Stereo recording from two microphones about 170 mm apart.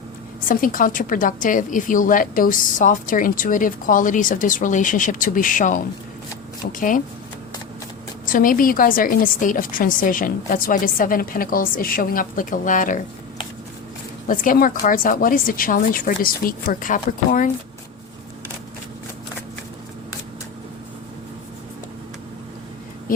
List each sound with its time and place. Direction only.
0.4 s a woman's voice: 55° left (ahead or behind)
8.3 s a woman's voice: 55° left (ahead or behind)
14.3 s a woman's voice: 55° left (ahead or behind)